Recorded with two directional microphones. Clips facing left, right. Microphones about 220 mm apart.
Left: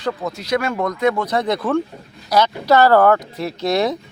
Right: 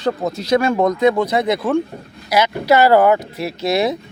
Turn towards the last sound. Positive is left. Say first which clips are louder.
# right 1 dB
turn(degrees=-10)  # may be behind; listen again after turning